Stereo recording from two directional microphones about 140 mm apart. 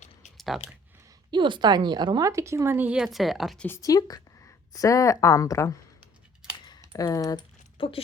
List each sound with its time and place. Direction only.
0.3 s a sound: centre (ahead or behind)
1.3 s speech: 35° right (ahead or behind); by 3.7 s centre (ahead or behind)
3.7 s a woman's voice: 25° left (ahead or behind)
6.9 s a woman's voice: 25° left (ahead or behind)
7.8 s speech: 40° left (ahead or behind)